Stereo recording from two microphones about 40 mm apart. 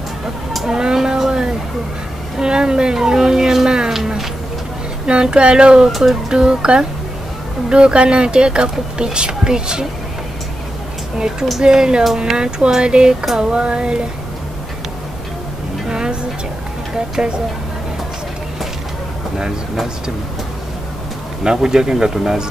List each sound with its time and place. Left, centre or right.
0.6 s a sound: centre
2.3 s speech: centre
5.0 s speech: right
11.1 s speech: centre
15.9 s music: centre
16.9 s speech: centre
19.3 s speech: centre
21.5 s speech: centre